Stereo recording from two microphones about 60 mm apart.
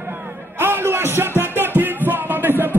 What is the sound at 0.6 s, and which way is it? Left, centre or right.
Music, right.